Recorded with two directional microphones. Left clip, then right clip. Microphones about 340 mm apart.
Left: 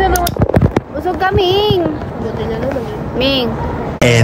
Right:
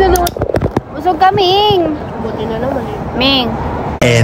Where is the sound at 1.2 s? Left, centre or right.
Centre.